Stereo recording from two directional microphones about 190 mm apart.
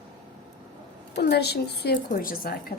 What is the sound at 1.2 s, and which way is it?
Speech, 60° left (ahead or behind).